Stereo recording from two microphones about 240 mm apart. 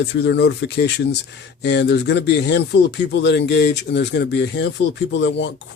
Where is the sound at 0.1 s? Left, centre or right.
Left.